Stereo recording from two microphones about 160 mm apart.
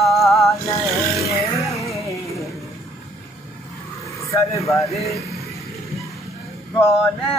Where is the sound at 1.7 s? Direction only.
Centre (ahead or behind).